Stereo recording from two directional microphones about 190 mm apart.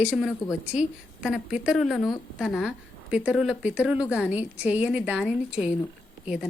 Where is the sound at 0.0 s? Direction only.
Centre (ahead or behind).